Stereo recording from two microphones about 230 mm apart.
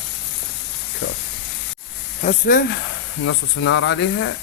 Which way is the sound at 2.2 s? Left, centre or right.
Left.